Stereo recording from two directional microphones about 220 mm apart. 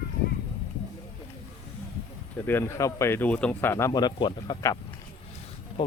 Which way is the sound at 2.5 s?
10° left (ahead or behind).